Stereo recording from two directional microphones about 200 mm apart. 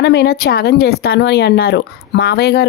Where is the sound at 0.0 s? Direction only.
55° left (ahead or behind).